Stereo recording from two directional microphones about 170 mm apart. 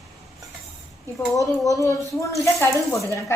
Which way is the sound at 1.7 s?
20° left (ahead or behind).